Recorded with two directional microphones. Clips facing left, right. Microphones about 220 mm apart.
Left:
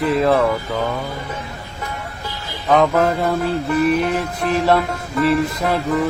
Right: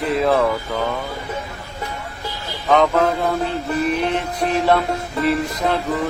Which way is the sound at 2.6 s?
5° left (ahead or behind).